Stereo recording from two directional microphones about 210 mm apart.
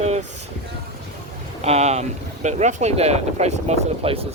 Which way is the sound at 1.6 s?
30° right (ahead or behind).